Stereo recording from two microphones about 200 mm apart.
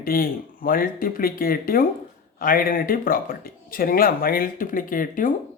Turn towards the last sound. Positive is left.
turn(degrees=45)  # may be behind; listen again after turning